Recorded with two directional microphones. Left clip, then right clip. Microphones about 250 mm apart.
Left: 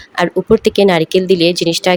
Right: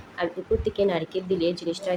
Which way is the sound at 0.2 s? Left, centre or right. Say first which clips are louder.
Left 14 dB; left.